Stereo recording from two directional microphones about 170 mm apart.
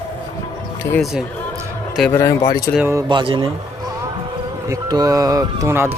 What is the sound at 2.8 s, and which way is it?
Speech, 15° right (ahead or behind).